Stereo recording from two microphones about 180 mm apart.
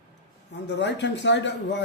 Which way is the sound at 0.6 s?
80° left.